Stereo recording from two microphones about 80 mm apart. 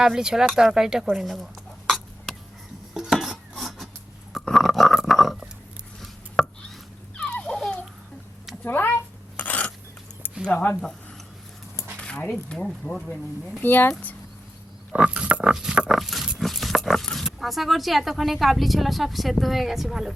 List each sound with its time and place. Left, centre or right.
0.0 s speech: centre
2.9 s chopping: centre
4.3 s burping: centre
6.0 s chopping: centre
7.2 s a sound: centre
8.6 s a sound: left
10.4 s speech: left
11.9 s a sound: centre
12.2 s speech: centre
14.9 s pig: centre
15.9 s speech: centre